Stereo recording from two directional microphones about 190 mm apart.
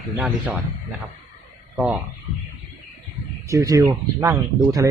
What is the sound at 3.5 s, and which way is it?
Speech, 20° right (ahead or behind).